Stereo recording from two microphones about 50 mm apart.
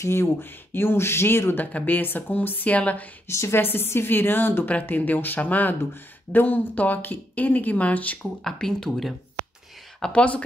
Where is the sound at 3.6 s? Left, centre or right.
Left.